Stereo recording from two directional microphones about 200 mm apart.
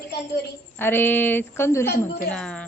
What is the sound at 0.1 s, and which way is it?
Speech, 55° left (ahead or behind).